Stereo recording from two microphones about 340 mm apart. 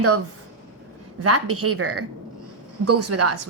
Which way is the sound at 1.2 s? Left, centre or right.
Right.